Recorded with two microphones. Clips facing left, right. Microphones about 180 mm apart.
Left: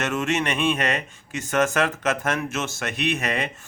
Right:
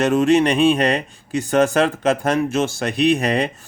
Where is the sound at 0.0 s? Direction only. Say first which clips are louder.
Right 10 dB; 35° right (ahead or behind).